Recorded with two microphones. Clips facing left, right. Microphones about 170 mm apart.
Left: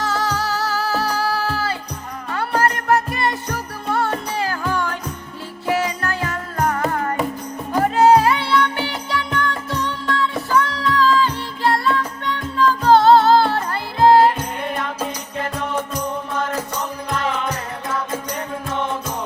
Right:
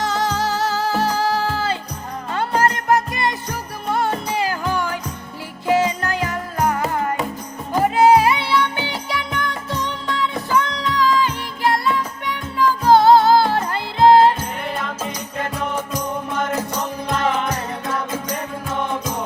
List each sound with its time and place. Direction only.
0.0 s music: 20° right (ahead or behind)